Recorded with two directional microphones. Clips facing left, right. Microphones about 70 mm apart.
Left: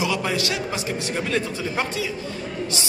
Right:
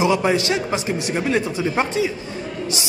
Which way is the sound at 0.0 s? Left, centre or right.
Right.